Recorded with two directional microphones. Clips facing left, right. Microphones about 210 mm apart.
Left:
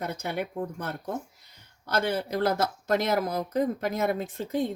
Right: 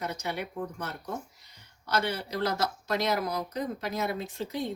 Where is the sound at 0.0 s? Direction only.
55° left (ahead or behind).